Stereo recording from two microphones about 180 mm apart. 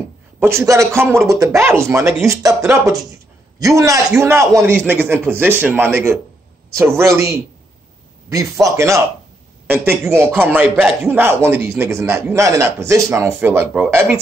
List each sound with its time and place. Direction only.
0.4 s a man's voice: 15° right (ahead or behind)
3.5 s a man's voice: 20° right (ahead or behind)